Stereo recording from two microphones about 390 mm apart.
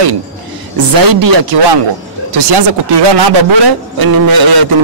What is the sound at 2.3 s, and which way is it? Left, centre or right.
Speech, right.